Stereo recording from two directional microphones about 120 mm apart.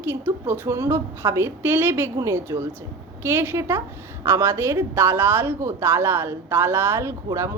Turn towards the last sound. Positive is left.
turn(degrees=-25)  # may be behind; listen again after turning